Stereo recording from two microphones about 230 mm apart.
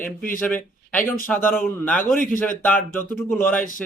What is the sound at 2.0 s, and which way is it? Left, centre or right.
Speech, left.